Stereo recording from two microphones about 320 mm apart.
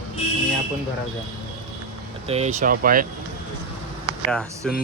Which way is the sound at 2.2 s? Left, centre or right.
Centre.